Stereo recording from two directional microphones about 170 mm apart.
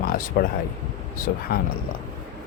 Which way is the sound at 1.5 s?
65° left (ahead or behind).